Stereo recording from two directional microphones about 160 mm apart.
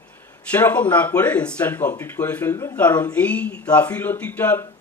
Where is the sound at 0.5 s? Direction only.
10° left (ahead or behind).